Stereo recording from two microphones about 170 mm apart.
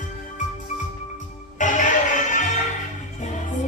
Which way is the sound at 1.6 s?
45° left (ahead or behind).